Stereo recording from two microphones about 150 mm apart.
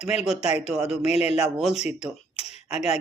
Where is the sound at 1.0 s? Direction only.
45° left (ahead or behind).